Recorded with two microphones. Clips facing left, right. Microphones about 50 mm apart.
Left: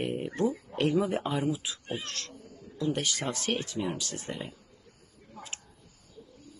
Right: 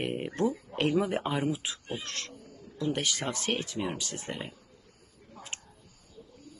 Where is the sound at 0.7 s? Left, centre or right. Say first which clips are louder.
Left 1 dB; right.